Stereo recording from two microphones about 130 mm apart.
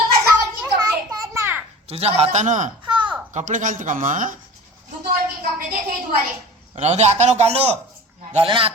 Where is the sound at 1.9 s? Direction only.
50° right (ahead or behind); by 4.3 s 90° right.